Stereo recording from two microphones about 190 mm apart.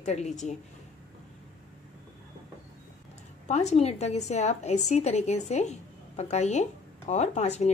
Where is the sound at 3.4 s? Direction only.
35° left (ahead or behind).